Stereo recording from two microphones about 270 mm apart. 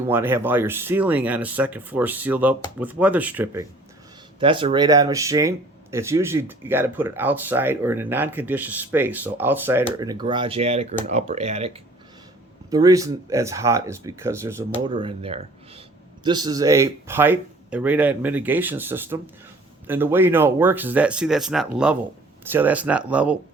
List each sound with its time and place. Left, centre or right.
0.1 s speech: centre
4.4 s speech: centre
12.7 s speech: centre